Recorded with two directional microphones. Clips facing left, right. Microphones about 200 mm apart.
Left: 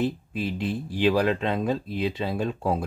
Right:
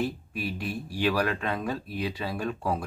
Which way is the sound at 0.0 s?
20° left (ahead or behind).